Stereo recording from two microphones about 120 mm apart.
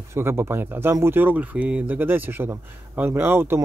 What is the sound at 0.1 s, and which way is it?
Speech, 20° right (ahead or behind).